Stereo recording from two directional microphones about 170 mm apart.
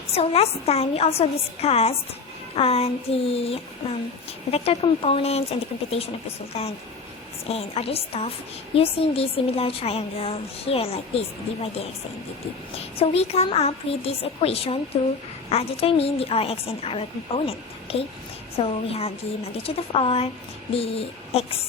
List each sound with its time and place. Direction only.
0.1 s a woman's voice: 35° left (ahead or behind)